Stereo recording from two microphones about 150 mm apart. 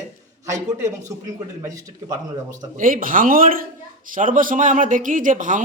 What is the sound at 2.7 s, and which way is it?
A man's voice, 65° right (ahead or behind).